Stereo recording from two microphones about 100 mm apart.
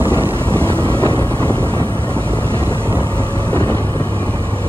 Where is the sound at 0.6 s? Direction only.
60° right (ahead or behind).